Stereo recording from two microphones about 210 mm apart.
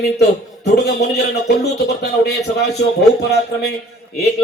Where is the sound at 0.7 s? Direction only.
50° left (ahead or behind).